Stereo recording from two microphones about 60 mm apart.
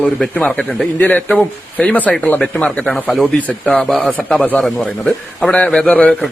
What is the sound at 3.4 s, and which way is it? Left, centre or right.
Speech, left.